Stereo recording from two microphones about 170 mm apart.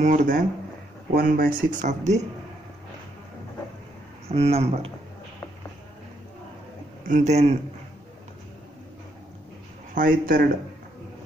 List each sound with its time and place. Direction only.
0.0 s speech: 50° right (ahead or behind)
4.3 s speech: 35° right (ahead or behind)
7.1 s speech: 45° right (ahead or behind)
9.9 s speech: 55° right (ahead or behind)